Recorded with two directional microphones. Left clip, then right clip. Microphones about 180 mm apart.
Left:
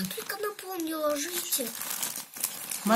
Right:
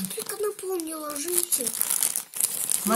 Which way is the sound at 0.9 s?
60° right (ahead or behind).